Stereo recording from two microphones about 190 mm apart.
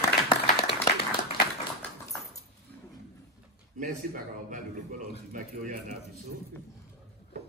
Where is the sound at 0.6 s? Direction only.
30° left (ahead or behind).